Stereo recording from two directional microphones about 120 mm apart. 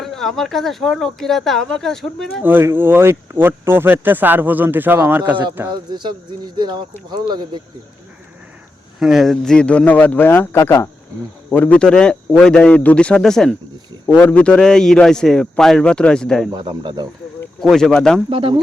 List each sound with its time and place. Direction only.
0.0 s speech: 5° left (ahead or behind)
2.4 s speech: 15° right (ahead or behind)
5.6 s speech: 35° right (ahead or behind)
9.0 s a man's voice: centre (ahead or behind); by 10.8 s 25° left (ahead or behind)
11.5 s a man's voice: 15° left (ahead or behind)
16.5 s speech: 40° right (ahead or behind)
17.6 s speech: 5° left (ahead or behind)
18.3 s speech: 45° right (ahead or behind)